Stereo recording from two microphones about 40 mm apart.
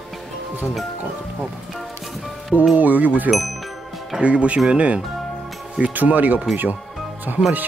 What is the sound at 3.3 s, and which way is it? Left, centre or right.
Music, centre.